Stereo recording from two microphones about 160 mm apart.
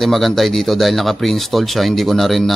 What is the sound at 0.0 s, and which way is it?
Speech, centre (ahead or behind).